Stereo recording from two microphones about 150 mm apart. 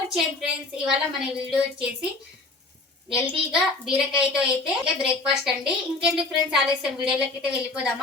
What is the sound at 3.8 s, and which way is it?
A woman's voice, 5° right (ahead or behind).